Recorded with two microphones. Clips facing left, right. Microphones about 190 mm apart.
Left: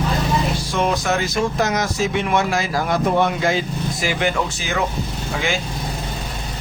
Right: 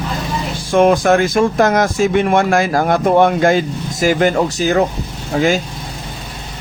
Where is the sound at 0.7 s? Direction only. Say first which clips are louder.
Right 11 dB; 50° right (ahead or behind).